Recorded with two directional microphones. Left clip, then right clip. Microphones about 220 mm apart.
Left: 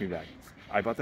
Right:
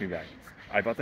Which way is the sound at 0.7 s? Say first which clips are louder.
Right 1 dB; 15° left (ahead or behind).